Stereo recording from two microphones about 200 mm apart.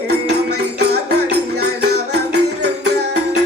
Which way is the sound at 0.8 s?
55° right (ahead or behind).